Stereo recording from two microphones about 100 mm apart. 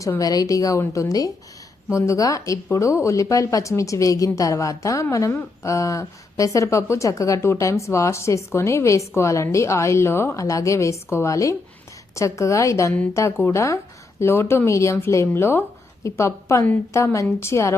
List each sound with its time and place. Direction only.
0.2 s speech: 40° left (ahead or behind)